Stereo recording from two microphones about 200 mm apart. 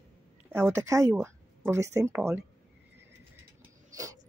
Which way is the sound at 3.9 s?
15° right (ahead or behind).